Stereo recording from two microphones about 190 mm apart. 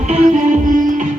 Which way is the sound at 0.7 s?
45° right (ahead or behind).